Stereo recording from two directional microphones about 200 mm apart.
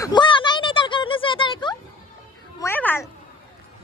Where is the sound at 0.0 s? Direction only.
25° left (ahead or behind).